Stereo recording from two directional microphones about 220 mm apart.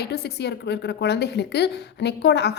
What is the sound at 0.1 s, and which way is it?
A woman's voice, 50° left (ahead or behind).